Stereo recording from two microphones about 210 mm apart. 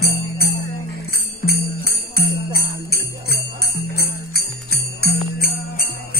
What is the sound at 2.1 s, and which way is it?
Jingle bell, 50° left (ahead or behind).